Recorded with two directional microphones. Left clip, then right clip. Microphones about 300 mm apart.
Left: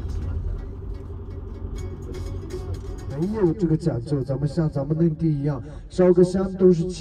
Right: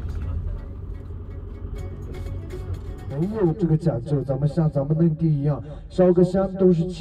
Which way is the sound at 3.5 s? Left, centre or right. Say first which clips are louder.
Even; centre.